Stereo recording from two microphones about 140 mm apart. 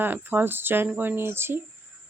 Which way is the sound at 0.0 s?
15° right (ahead or behind).